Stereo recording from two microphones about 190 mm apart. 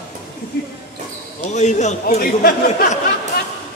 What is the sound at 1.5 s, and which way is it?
A man's voice, 40° left (ahead or behind).